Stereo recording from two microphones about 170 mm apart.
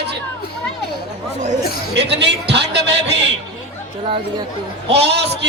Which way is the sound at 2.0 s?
90° right.